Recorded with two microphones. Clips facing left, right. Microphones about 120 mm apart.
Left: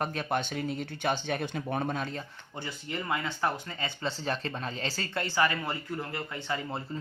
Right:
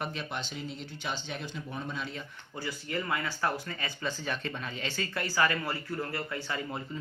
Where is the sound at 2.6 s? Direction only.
25° left (ahead or behind).